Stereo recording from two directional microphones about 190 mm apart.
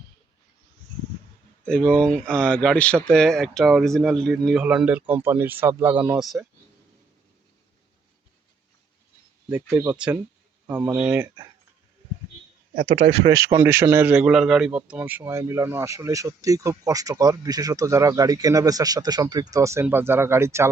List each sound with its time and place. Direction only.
1.6 s speech: 5° left (ahead or behind)
9.6 s a man's voice: 15° right (ahead or behind)
12.8 s speech: 30° right (ahead or behind)
13.3 s a man's voice: 15° right (ahead or behind)